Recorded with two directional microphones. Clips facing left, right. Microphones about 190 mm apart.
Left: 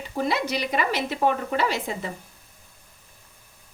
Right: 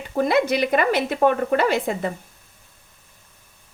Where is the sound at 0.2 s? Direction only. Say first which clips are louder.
Right 6 dB; 55° right (ahead or behind).